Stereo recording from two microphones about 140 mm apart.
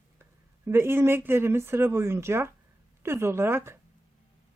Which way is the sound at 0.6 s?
15° right (ahead or behind).